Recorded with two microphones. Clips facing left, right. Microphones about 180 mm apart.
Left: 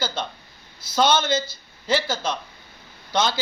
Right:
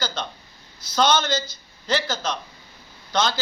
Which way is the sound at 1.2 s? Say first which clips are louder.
Left 2 dB; 50° left (ahead or behind).